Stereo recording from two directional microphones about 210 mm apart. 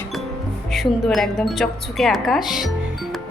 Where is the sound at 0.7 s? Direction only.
Centre (ahead or behind).